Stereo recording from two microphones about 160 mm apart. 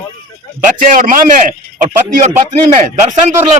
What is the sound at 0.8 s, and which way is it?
A man's voice, 55° right (ahead or behind).